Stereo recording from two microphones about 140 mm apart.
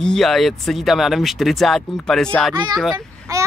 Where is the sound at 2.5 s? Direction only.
30° right (ahead or behind).